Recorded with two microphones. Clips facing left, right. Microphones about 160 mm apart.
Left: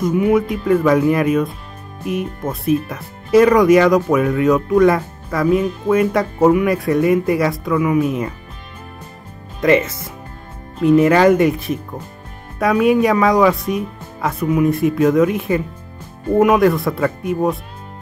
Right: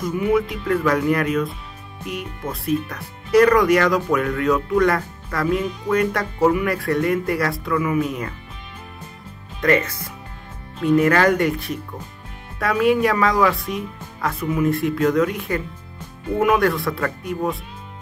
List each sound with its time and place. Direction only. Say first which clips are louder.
0.1 s speech: left 2 dB; 20° left (ahead or behind)
2.5 s speech: left 4 dB; 25° left (ahead or behind)
9.6 s speech: left 4 dB; 20° left (ahead or behind)